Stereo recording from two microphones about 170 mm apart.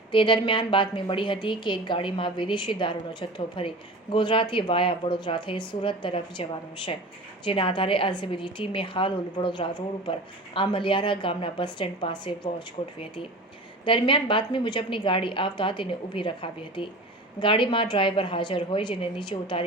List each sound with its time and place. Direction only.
0.1 s a woman's voice: 30° left (ahead or behind)
7.4 s a woman's voice: 30° left (ahead or behind)